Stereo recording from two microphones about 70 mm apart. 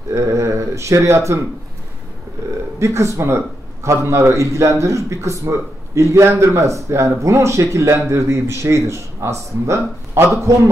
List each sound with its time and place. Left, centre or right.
0.1 s a man's voice: right
2.8 s a man's voice: right